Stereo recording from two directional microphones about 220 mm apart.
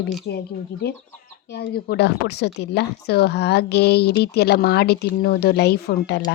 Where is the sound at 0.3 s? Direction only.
50° left (ahead or behind).